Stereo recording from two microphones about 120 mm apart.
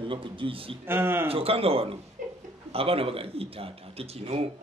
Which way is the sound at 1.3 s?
55° right (ahead or behind).